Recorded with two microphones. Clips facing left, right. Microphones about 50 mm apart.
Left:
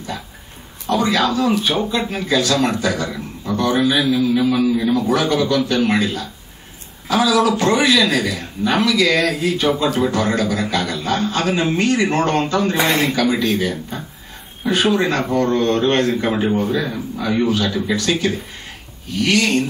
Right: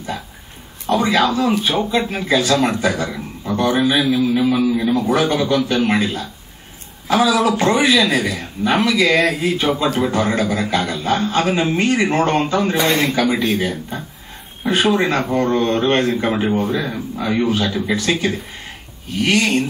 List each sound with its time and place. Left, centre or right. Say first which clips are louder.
0.8 s a man's voice: right 1 dB; right
12.7 s speech: right 1 dB; centre
13.1 s a man's voice: even; right
19.1 s a man's voice: even; right